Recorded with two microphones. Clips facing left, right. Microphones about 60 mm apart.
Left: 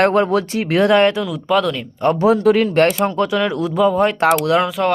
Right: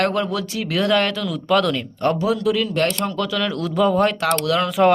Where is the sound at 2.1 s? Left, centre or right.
Left.